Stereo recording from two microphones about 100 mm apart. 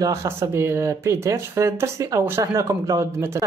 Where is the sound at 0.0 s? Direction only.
30° right (ahead or behind).